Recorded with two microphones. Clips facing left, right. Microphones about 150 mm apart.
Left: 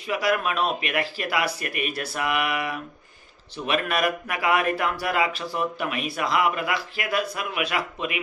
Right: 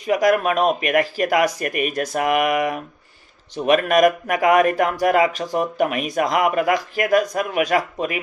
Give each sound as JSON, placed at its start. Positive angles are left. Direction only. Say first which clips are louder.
{"t": 0.0, "sound": "speech", "louder": "right 7 dB", "side_deg": -45}